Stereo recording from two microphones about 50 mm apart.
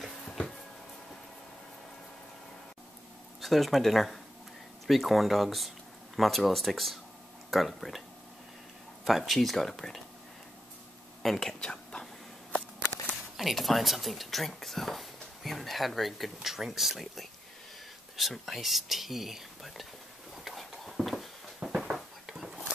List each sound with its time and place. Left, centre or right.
3.3 s speech: centre
9.0 s speech: centre
11.2 s speech: centre
11.6 s whispering: centre
13.4 s speech: centre
20.4 s a sound: centre
21.6 s a sound: centre